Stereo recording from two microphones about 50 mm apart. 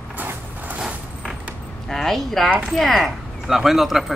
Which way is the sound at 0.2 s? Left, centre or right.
Right.